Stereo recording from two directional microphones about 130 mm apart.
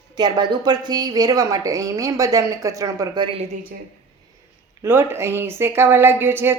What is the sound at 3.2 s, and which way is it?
Speech, 45° right (ahead or behind).